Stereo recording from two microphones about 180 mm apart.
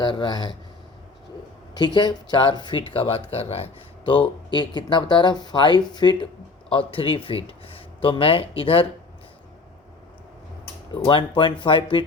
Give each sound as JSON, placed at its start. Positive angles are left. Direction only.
{"t": 0.0, "sound": "speech", "side_deg": 25}
{"t": 1.7, "sound": "speech", "side_deg": 25}
{"t": 11.0, "sound": "speech", "side_deg": 25}